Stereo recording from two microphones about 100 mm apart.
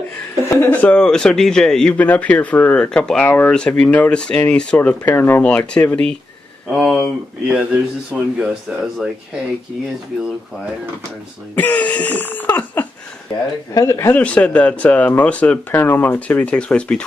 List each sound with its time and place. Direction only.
0.5 s a man's voice: 20° left (ahead or behind)
3.5 s a man's voice: 5° left (ahead or behind)
6.7 s a man's voice: 5° right (ahead or behind)
11.5 s a man's voice: 15° left (ahead or behind)
13.7 s speech: 30° left (ahead or behind)
14.1 s a man's voice: 15° left (ahead or behind)
15.7 s a man's voice: 25° left (ahead or behind)